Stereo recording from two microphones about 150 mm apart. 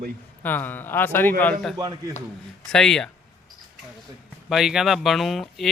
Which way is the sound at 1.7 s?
25° right (ahead or behind).